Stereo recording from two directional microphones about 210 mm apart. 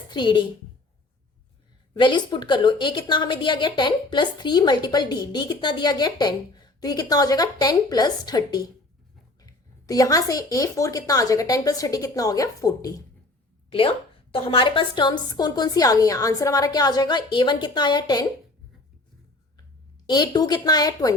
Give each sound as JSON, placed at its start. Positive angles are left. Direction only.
{"t": 0.1, "sound": "a child's voice", "side_deg": 20}
{"t": 1.9, "sound": "a woman's voice", "side_deg": 20}
{"t": 20.1, "sound": "a woman's voice", "side_deg": 20}